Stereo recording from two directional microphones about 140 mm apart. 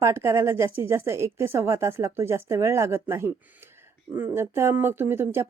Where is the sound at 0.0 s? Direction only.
20° right (ahead or behind).